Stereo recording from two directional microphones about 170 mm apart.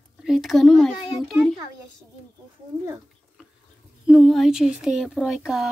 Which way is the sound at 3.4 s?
5° right (ahead or behind).